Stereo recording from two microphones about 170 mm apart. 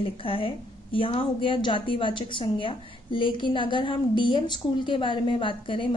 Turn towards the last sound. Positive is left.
turn(degrees=30)  # may be behind; listen again after turning